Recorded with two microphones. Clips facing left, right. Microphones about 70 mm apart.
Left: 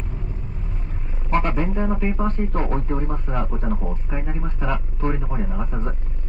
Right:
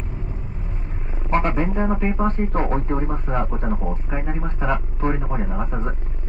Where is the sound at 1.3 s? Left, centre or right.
Right.